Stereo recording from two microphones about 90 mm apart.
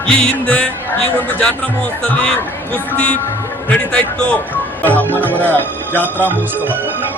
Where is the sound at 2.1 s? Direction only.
15° left (ahead or behind).